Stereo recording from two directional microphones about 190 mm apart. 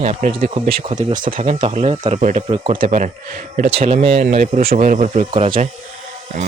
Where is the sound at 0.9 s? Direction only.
45° right (ahead or behind).